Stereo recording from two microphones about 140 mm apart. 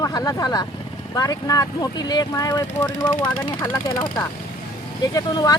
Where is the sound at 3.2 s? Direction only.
10° left (ahead or behind).